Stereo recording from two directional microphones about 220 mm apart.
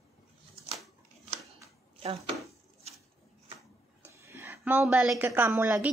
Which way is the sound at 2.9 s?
30° right (ahead or behind).